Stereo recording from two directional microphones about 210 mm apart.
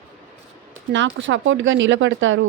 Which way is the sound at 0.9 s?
60° right (ahead or behind).